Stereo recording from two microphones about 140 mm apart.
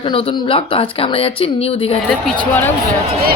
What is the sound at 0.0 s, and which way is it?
Speech, 40° left (ahead or behind).